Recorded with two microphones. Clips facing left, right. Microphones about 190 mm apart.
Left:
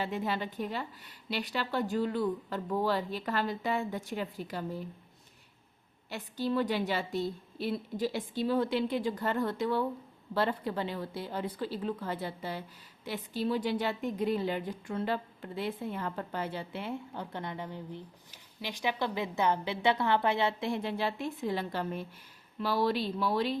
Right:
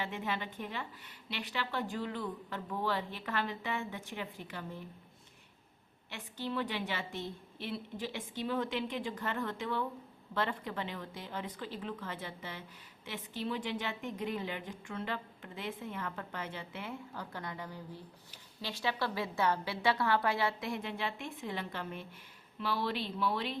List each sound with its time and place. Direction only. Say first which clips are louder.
0.0 s a woman's voice: left 5 dB; 35° left (ahead or behind)
6.1 s a woman's voice: left 7 dB; 35° left (ahead or behind)